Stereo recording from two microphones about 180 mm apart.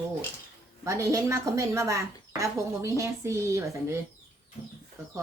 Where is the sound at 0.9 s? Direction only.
15° right (ahead or behind).